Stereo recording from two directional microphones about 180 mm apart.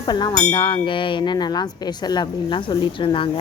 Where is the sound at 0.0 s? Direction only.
25° left (ahead or behind).